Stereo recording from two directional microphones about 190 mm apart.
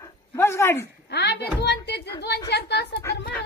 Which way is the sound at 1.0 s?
60° left (ahead or behind).